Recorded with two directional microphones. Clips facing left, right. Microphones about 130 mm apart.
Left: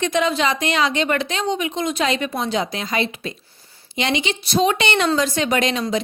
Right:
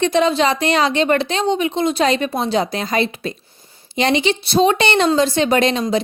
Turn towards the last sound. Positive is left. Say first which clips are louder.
# right 4 dB
turn(degrees=-35)  # may be behind; listen again after turning